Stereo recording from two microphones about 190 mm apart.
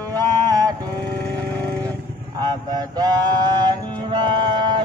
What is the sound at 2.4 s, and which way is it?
Mantra, 20° right (ahead or behind).